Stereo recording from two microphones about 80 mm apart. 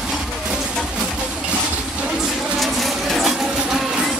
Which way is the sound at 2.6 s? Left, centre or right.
Centre.